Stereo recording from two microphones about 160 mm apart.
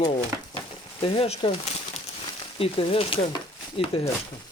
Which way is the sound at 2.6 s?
35° left (ahead or behind).